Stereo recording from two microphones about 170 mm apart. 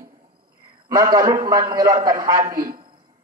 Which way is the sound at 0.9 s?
20° right (ahead or behind).